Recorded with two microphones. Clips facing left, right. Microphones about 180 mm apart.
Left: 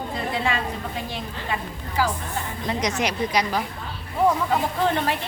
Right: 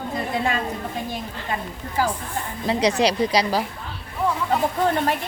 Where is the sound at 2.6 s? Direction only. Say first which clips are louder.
Right 6 dB; 30° right (ahead or behind).